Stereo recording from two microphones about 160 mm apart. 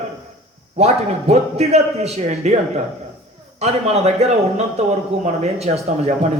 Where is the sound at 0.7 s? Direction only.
40° right (ahead or behind).